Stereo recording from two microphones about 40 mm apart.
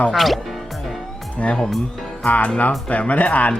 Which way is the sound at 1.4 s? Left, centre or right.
Left.